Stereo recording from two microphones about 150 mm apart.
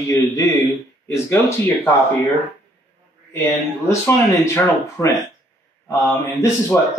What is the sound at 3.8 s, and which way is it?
A man's voice, 20° left (ahead or behind).